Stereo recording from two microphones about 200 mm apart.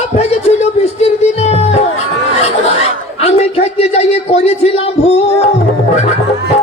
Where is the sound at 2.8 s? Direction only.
30° left (ahead or behind).